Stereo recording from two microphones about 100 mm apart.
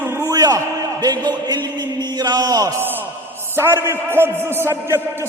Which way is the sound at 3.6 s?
25° right (ahead or behind).